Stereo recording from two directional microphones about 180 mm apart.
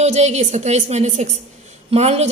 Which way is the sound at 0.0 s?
35° right (ahead or behind).